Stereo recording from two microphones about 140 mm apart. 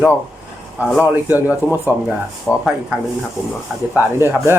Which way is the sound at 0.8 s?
5° right (ahead or behind).